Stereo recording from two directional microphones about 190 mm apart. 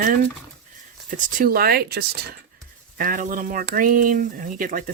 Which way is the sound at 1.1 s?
45° right (ahead or behind).